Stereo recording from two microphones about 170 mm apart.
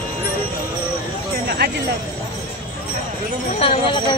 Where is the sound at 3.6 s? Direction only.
30° left (ahead or behind).